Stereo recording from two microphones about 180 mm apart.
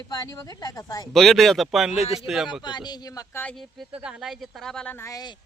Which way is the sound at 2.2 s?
Centre (ahead or behind).